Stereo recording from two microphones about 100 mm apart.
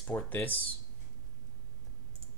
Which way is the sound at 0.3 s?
20° left (ahead or behind).